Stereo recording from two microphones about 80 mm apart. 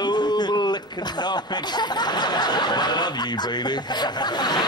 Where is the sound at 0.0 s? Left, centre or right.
Left.